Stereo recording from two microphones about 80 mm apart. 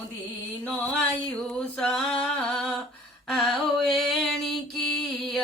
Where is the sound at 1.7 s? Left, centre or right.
Centre.